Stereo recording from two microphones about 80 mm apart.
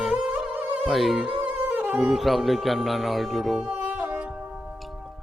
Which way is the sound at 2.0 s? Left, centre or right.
Centre.